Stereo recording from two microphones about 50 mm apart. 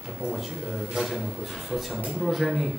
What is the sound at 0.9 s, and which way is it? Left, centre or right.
A man's voice, centre.